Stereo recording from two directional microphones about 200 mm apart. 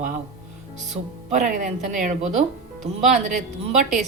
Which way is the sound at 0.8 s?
35° right (ahead or behind).